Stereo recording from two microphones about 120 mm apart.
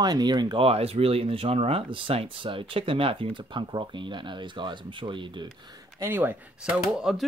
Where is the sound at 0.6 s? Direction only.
55° right (ahead or behind).